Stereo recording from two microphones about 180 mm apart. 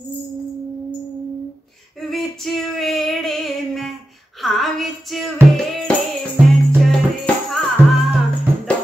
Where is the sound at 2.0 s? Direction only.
Centre (ahead or behind).